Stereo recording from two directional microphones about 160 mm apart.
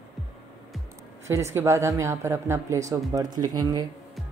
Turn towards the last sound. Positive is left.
turn(degrees=-25)  # may be behind; listen again after turning